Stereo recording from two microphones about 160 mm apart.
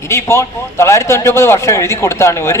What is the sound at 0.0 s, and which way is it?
A man's voice, 15° left (ahead or behind).